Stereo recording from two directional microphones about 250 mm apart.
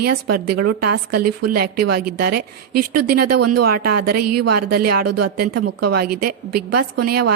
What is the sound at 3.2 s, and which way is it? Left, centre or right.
Speech, right.